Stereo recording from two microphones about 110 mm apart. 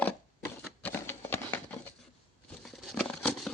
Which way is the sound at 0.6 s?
15° left (ahead or behind).